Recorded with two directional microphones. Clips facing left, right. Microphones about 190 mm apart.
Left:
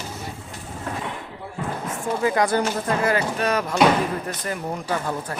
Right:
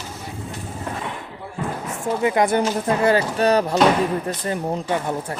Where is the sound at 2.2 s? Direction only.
20° right (ahead or behind).